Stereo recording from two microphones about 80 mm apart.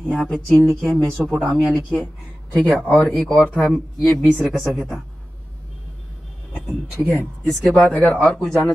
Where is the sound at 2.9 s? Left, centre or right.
Centre.